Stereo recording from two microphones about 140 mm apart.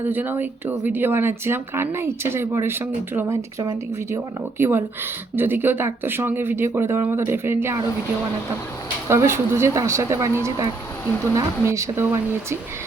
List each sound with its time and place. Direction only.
0.0 s speech: 15° right (ahead or behind)
3.6 s speech: 30° right (ahead or behind)
4.5 s speech: 15° right (ahead or behind)
9.0 s speech: 20° right (ahead or behind)
11.3 s speech: 20° right (ahead or behind)